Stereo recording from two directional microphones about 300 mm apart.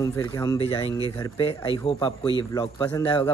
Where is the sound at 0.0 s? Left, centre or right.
Centre.